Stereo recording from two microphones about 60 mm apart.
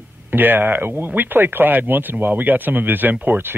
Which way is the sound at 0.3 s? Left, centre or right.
Right.